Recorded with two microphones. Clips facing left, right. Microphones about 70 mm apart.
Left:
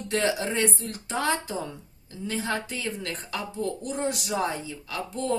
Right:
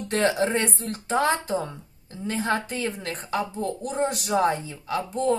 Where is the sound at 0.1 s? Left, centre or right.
Right.